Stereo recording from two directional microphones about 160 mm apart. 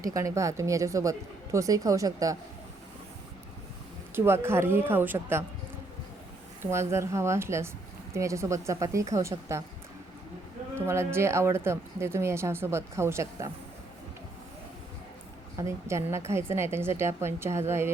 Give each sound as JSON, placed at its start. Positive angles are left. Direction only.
{"t": 0.0, "sound": "speech", "side_deg": -20}
{"t": 4.1, "sound": "speech", "side_deg": -15}
{"t": 6.6, "sound": "speech", "side_deg": -15}
{"t": 10.8, "sound": "speech", "side_deg": -15}
{"t": 15.5, "sound": "speech", "side_deg": -20}